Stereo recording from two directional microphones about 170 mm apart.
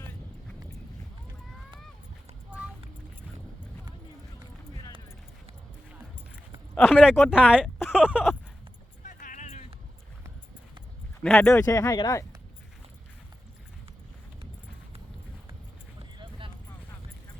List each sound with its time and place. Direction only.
6.7 s speech: 10° left (ahead or behind)
7.0 s speech: 5° right (ahead or behind)
9.0 s music: 50° left (ahead or behind)
11.2 s speech: 5° left (ahead or behind)
11.5 s speech: 20° left (ahead or behind)